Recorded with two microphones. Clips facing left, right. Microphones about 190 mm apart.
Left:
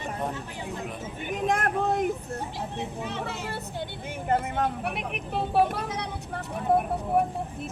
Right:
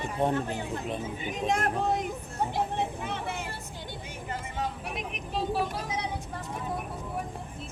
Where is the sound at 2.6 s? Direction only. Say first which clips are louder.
Right 3 dB; 55° right (ahead or behind).